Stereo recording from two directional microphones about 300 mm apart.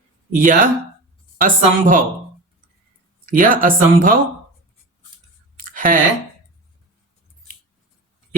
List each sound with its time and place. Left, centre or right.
0.3 s speech: right
3.2 s speech: right
5.5 s a sound: right